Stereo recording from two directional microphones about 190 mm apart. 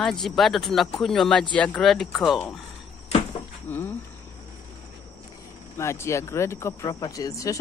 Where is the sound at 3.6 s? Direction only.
10° left (ahead or behind).